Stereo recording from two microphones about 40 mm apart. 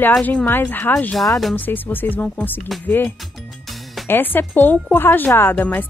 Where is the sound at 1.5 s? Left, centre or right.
Left.